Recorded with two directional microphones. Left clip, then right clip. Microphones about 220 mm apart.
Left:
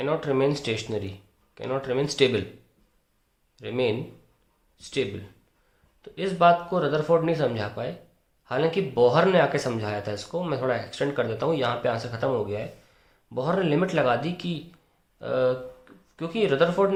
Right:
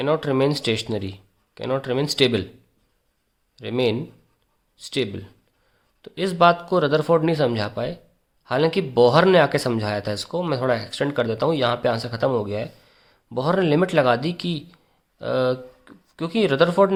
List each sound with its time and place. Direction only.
0.0 s speech: 40° right (ahead or behind)
3.5 s speech: 35° right (ahead or behind)